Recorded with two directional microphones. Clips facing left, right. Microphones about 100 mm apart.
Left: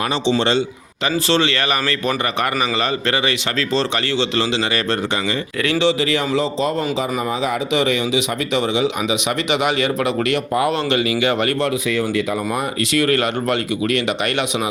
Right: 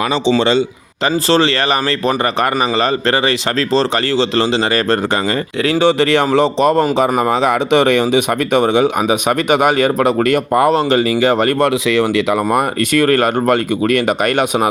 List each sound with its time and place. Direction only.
1.3 s a man's voice: 35° right (ahead or behind)
5.8 s a man's voice: 65° right (ahead or behind); by 11.5 s 40° right (ahead or behind)
11.6 s speech: 90° right
12.5 s speech: 55° right (ahead or behind)